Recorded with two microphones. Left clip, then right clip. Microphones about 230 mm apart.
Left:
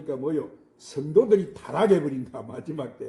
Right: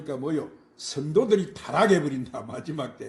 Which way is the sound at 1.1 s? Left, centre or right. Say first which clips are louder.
Left 3 dB; right.